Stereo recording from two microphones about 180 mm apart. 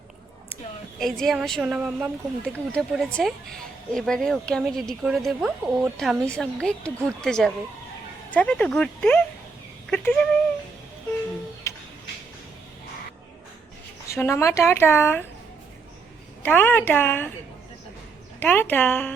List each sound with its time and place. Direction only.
0.9 s speech: centre (ahead or behind)
11.6 s music: 15° left (ahead or behind)
14.1 s speech: 15° left (ahead or behind)
16.4 s speech: 10° left (ahead or behind)
18.3 s speech: 10° left (ahead or behind)